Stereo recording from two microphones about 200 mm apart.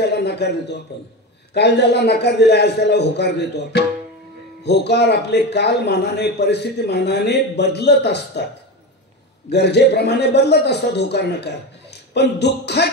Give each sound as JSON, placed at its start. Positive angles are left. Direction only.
{"t": 0.0, "sound": "a man's voice", "side_deg": 55}
{"t": 9.5, "sound": "a man's voice", "side_deg": 55}